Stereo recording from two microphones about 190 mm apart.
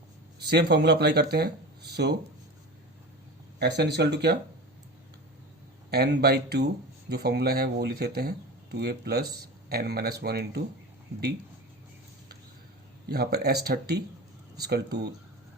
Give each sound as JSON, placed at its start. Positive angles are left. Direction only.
{"t": 0.3, "sound": "speech", "side_deg": -60}
{"t": 3.6, "sound": "speech", "side_deg": -60}
{"t": 5.9, "sound": "speech", "side_deg": -60}
{"t": 13.1, "sound": "speech", "side_deg": -55}